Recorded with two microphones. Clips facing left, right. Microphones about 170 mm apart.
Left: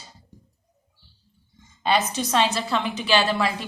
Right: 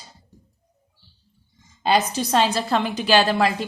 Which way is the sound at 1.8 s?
35° right (ahead or behind).